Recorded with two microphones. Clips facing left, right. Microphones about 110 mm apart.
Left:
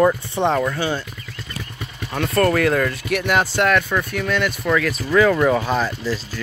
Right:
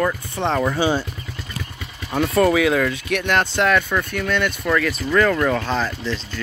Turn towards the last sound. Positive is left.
turn(degrees=5)  # may be behind; listen again after turning